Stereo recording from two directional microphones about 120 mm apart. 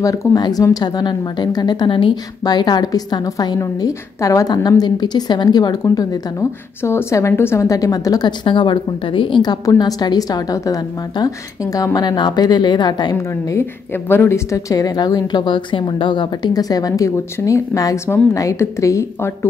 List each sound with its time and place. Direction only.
0.0 s a woman's voice: 25° left (ahead or behind)
6.8 s a woman's voice: 20° left (ahead or behind)